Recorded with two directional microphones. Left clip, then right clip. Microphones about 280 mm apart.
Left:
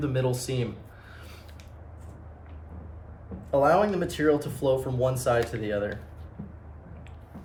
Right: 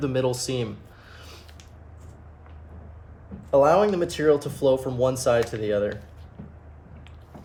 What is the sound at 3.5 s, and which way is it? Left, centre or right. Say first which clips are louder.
Speech: right 4 dB; right.